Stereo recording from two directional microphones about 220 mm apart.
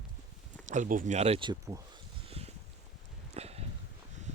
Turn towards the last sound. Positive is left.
turn(degrees=-30)  # may be behind; listen again after turning